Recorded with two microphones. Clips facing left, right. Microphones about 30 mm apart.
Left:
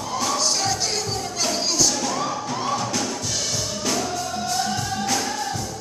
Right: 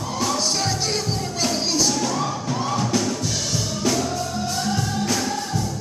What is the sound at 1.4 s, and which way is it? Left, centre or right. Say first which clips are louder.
Music: right 1 dB; centre.